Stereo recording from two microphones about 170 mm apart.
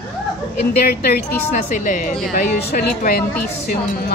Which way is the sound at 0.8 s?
65° left (ahead or behind).